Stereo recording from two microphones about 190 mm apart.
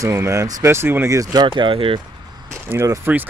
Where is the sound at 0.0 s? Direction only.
15° right (ahead or behind).